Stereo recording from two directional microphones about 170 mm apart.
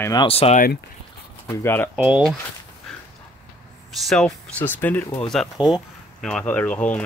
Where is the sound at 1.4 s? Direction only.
10° left (ahead or behind).